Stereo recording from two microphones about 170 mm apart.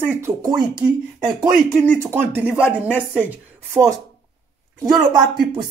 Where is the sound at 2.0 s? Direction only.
15° right (ahead or behind).